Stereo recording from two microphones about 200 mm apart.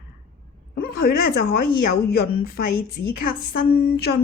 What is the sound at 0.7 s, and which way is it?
Speech, 50° left (ahead or behind).